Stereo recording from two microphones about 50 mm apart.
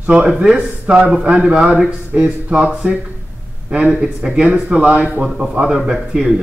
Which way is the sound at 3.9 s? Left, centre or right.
Centre.